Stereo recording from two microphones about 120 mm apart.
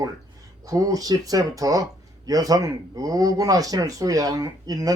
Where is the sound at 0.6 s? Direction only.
30° right (ahead or behind).